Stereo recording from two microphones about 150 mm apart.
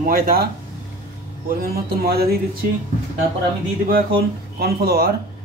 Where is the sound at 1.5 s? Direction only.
85° right.